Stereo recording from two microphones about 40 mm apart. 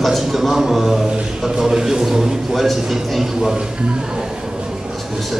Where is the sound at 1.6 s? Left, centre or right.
Centre.